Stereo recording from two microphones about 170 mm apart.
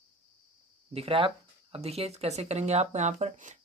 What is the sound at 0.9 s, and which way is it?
Speech, 35° right (ahead or behind).